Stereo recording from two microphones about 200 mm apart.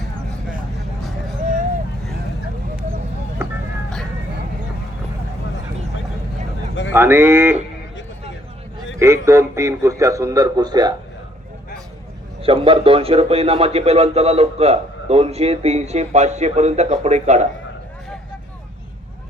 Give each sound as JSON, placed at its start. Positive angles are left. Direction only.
{"t": 6.9, "sound": "speech", "side_deg": -10}
{"t": 9.0, "sound": "speech", "side_deg": -15}
{"t": 12.4, "sound": "a man's voice", "side_deg": -25}